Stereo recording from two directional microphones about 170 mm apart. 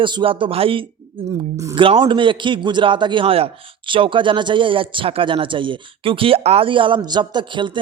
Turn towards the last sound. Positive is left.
turn(degrees=-30)  # may be behind; listen again after turning